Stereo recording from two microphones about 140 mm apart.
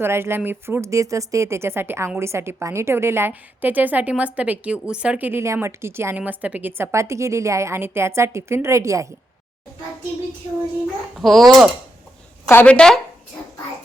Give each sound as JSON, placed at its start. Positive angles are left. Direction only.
{"t": 0.0, "sound": "speech", "side_deg": -15}
{"t": 11.2, "sound": "speech", "side_deg": 0}
{"t": 12.5, "sound": "speech", "side_deg": 10}